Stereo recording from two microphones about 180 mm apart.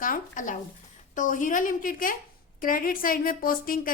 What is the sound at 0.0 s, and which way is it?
A woman's voice, 50° left (ahead or behind).